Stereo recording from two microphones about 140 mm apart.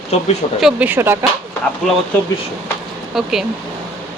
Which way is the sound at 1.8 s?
5° left (ahead or behind).